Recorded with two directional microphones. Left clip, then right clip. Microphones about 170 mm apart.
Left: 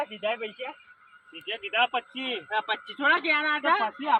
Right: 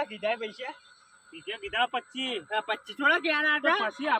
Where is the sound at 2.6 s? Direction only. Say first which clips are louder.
Even; 45° right (ahead or behind).